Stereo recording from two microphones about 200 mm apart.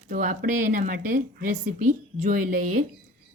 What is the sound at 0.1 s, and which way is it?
A woman's voice, 40° right (ahead or behind).